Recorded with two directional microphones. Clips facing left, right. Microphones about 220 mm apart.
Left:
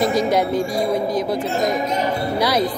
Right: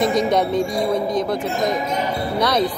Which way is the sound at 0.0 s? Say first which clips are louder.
Even; 5° left (ahead or behind).